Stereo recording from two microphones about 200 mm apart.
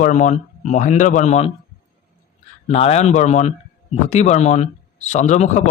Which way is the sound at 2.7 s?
30° left (ahead or behind).